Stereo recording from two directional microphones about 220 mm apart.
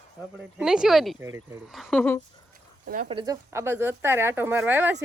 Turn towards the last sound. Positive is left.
turn(degrees=-10)  # may be behind; listen again after turning